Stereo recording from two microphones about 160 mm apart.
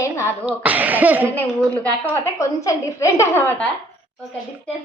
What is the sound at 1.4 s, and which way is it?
A woman's voice, 10° left (ahead or behind).